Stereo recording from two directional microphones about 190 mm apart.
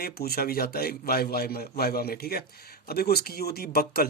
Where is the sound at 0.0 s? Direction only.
55° left (ahead or behind).